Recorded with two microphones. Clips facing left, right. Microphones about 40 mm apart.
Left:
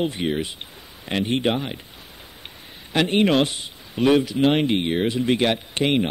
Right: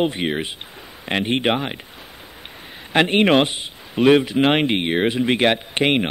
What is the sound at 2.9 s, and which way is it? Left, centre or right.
Speech, right.